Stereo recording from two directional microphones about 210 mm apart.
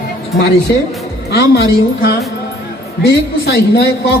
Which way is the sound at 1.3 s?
50° left (ahead or behind).